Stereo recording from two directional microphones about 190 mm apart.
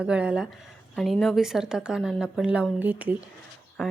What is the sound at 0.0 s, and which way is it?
A woman's voice, 5° right (ahead or behind).